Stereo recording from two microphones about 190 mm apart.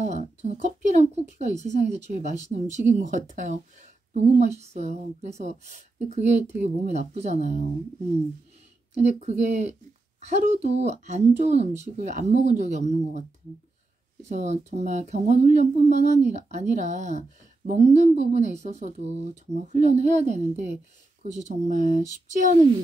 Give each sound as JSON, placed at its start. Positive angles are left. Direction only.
{"t": 0.0, "sound": "speech", "side_deg": -40}
{"t": 8.9, "sound": "speech", "side_deg": -35}
{"t": 14.3, "sound": "speech", "side_deg": -35}